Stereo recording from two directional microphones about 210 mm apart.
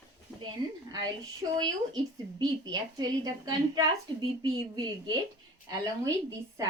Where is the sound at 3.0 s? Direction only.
20° right (ahead or behind).